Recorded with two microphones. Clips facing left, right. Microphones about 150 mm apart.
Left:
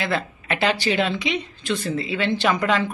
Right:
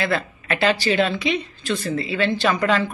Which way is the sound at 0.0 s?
20° left (ahead or behind).